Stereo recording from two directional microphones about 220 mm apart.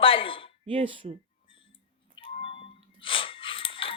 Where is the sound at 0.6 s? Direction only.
25° right (ahead or behind).